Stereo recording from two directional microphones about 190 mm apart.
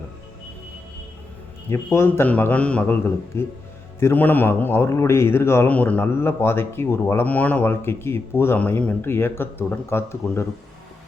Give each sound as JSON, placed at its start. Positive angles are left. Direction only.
{"t": 1.7, "sound": "speech", "side_deg": 15}